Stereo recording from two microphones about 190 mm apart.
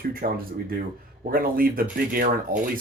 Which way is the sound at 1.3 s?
50° right (ahead or behind).